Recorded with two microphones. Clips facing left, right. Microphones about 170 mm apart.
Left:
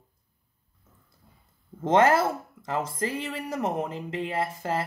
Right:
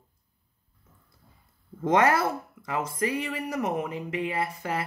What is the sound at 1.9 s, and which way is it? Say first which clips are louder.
Speech: left 2 dB; 25° left (ahead or behind).